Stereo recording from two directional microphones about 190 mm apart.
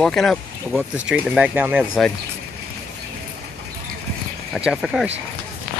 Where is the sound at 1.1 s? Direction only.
10° right (ahead or behind).